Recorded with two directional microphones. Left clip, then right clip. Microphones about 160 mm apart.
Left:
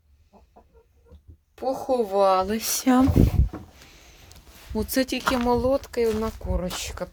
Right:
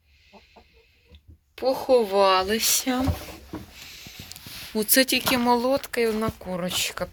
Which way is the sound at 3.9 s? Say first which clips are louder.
Right 9 dB; 25° left (ahead or behind).